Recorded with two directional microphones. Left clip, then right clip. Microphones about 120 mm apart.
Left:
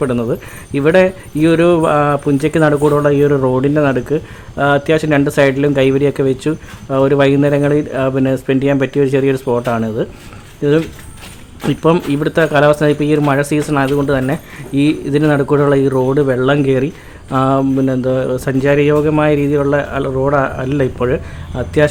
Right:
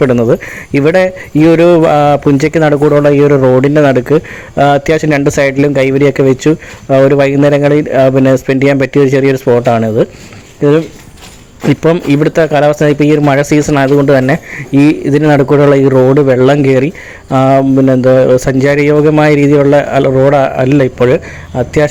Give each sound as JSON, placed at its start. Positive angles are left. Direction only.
{"t": 0.0, "sound": "speech", "side_deg": -40}